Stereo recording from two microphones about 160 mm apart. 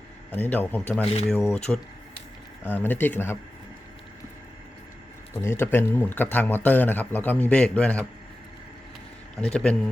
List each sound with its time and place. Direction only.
0.3 s speech: 10° left (ahead or behind)
5.4 s speech: 15° left (ahead or behind)
9.4 s speech: 5° left (ahead or behind)